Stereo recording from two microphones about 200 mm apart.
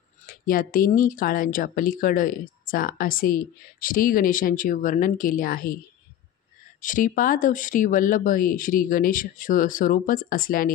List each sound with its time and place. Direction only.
0.3 s speech: 45° left (ahead or behind)
6.8 s speech: 40° left (ahead or behind)